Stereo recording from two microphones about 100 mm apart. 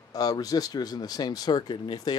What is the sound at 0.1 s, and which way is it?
Speech, 40° left (ahead or behind).